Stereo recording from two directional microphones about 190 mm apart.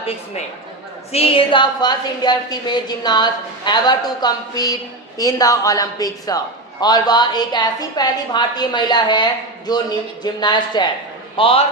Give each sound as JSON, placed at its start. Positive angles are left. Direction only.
{"t": 1.1, "sound": "a woman's voice", "side_deg": 30}